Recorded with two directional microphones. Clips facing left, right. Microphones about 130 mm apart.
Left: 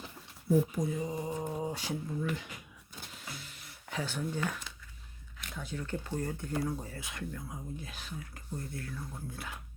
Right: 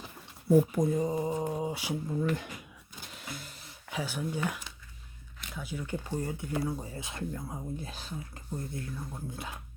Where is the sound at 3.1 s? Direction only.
50° right (ahead or behind).